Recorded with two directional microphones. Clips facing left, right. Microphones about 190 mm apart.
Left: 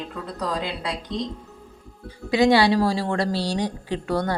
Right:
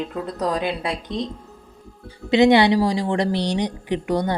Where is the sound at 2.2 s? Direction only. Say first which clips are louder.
Right 3 dB; 20° right (ahead or behind).